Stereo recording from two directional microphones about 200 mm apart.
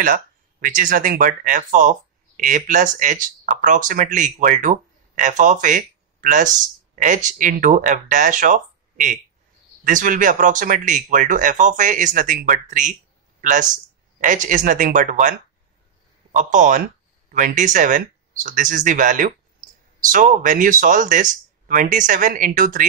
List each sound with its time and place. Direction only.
0.0 s speech: 40° right (ahead or behind)